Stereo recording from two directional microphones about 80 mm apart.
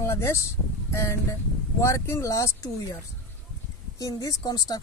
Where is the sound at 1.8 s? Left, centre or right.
Left.